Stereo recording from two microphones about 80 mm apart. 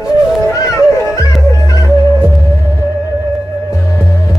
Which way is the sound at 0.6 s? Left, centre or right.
Left.